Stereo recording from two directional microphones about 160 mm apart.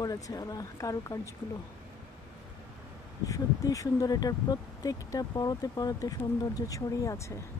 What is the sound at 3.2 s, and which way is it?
Speech, 20° left (ahead or behind).